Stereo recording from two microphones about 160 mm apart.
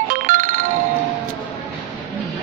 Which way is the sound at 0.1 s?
55° right (ahead or behind).